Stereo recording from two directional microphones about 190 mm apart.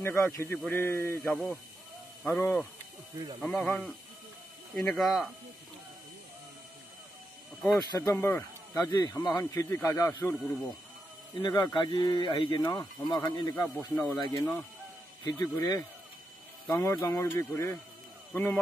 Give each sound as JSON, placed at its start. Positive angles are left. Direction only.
{"t": 0.0, "sound": "speech", "side_deg": 15}
{"t": 7.6, "sound": "speech", "side_deg": 20}
{"t": 11.4, "sound": "speech", "side_deg": 20}
{"t": 13.7, "sound": "speech", "side_deg": 10}
{"t": 15.2, "sound": "speech", "side_deg": 15}